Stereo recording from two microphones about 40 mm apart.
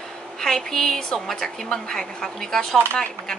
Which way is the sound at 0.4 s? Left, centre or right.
Centre.